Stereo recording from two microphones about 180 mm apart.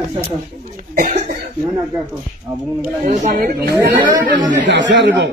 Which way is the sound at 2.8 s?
45° right (ahead or behind).